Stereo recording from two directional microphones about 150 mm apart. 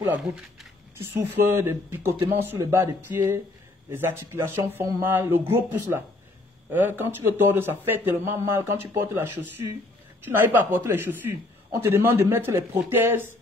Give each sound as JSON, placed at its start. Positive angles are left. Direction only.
{"t": 1.2, "sound": "speech", "side_deg": -15}